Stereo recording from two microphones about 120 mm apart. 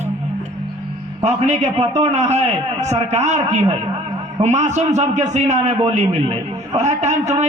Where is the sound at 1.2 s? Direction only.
75° right (ahead or behind).